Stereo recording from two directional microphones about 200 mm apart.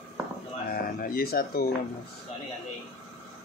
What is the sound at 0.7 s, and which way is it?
Speech, 45° left (ahead or behind).